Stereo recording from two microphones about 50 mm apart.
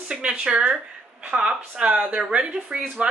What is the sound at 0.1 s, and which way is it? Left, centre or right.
A woman's voice, centre.